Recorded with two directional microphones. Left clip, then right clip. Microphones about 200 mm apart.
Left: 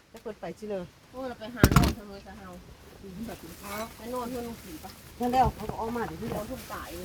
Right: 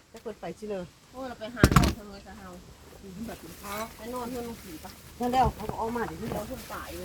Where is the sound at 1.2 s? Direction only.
15° left (ahead or behind).